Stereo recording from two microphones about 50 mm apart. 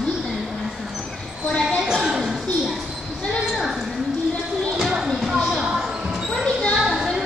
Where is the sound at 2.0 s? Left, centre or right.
Centre.